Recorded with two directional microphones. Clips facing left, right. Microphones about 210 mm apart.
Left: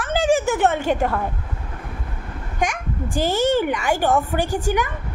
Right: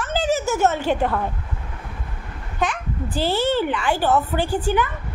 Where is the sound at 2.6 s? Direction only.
45° left (ahead or behind).